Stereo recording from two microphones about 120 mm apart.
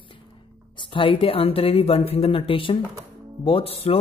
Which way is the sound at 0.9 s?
45° left (ahead or behind).